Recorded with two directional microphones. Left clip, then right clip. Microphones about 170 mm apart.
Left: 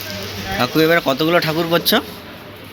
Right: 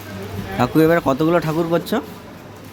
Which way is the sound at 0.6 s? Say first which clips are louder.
Even; 25° right (ahead or behind).